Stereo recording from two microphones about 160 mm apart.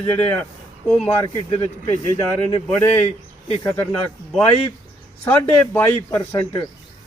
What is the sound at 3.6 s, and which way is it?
Speech, 15° left (ahead or behind).